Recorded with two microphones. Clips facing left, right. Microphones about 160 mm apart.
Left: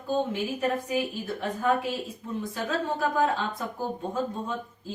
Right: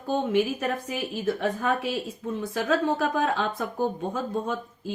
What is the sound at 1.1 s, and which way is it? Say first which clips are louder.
A woman's voice: right 5 dB; 75° right (ahead or behind).